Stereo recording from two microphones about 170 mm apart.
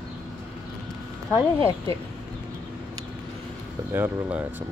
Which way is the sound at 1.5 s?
15° left (ahead or behind).